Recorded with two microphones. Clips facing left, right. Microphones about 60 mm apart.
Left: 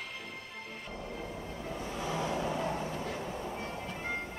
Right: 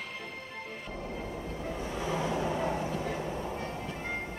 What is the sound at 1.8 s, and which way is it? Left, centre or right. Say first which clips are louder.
Vehicle: right 2 dB; right.